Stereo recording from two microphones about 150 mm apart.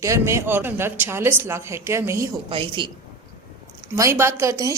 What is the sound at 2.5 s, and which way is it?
Speech, 35° right (ahead or behind).